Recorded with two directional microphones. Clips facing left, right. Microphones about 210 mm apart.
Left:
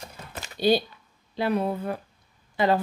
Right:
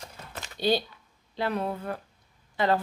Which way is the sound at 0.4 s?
10° left (ahead or behind).